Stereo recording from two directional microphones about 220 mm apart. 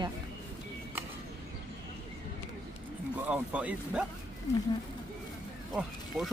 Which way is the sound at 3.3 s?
5° right (ahead or behind).